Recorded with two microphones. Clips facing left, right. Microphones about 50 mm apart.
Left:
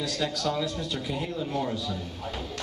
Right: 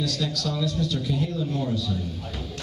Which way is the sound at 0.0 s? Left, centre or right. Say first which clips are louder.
Right 1 dB; left.